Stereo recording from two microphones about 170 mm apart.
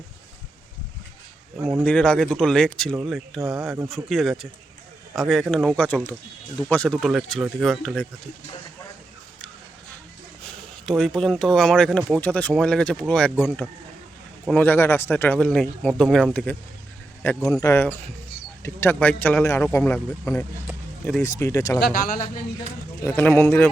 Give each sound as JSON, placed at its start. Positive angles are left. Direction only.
{"t": 1.8, "sound": "speech", "side_deg": 5}
{"t": 10.4, "sound": "speech", "side_deg": 5}
{"t": 17.2, "sound": "speech", "side_deg": 20}
{"t": 21.8, "sound": "speech", "side_deg": 65}
{"t": 23.0, "sound": "speech", "side_deg": 10}